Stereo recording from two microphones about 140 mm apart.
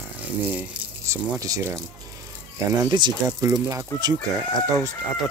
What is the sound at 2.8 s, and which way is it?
Speech, 30° right (ahead or behind).